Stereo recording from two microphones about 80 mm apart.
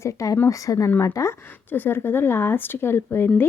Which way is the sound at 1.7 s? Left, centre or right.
Left.